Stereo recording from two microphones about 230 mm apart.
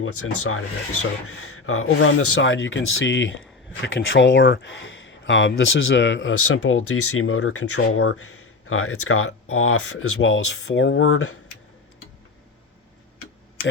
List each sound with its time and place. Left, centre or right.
0.0 s speech: left